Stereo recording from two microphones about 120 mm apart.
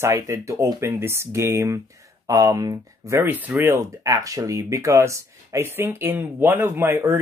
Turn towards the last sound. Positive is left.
turn(degrees=-20)  # may be behind; listen again after turning